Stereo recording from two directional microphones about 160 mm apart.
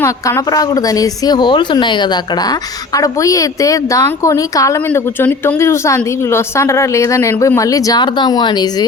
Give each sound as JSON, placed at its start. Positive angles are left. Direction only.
{"t": 0.0, "sound": "speech", "side_deg": 20}